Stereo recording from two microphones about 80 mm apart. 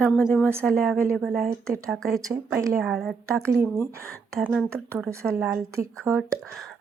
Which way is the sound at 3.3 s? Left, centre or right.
Right.